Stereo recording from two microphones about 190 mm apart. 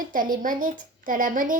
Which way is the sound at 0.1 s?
45° right (ahead or behind).